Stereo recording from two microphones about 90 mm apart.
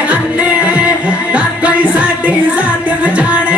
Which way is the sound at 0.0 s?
15° right (ahead or behind).